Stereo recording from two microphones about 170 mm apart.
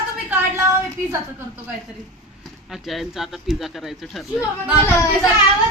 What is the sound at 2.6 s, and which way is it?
Speech, centre (ahead or behind).